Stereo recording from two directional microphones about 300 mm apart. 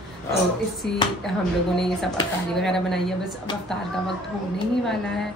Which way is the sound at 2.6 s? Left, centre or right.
Centre.